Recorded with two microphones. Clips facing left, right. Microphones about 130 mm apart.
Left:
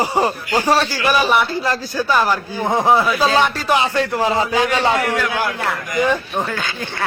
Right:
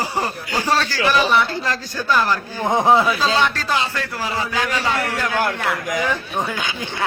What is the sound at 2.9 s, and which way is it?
Speech, 15° right (ahead or behind).